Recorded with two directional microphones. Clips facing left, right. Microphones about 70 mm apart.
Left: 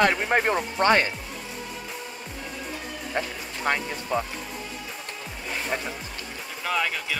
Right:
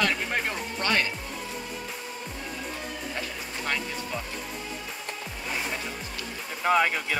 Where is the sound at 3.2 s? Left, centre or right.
Left.